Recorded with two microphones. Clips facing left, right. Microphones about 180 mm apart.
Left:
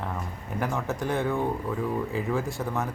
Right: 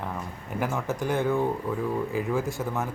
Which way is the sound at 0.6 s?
Centre (ahead or behind).